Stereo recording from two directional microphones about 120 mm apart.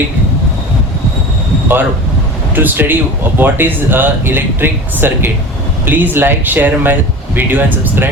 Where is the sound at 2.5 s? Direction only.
15° right (ahead or behind).